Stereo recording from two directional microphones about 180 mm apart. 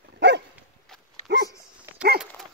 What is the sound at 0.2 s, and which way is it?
Dog, 75° right (ahead or behind).